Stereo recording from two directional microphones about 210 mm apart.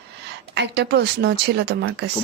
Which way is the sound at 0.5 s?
55° right (ahead or behind).